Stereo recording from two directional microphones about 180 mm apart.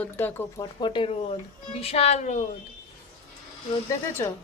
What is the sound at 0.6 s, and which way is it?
A woman's voice, 25° left (ahead or behind).